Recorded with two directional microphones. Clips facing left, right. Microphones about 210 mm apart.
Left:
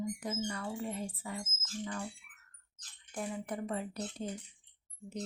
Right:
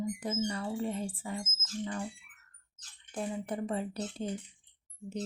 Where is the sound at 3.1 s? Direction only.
30° right (ahead or behind).